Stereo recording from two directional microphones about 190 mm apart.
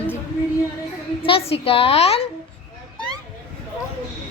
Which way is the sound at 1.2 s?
30° left (ahead or behind).